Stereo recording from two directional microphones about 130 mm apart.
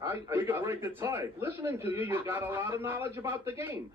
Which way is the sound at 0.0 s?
20° right (ahead or behind).